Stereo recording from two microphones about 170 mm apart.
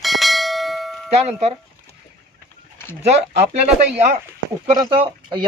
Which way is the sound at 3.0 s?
40° right (ahead or behind).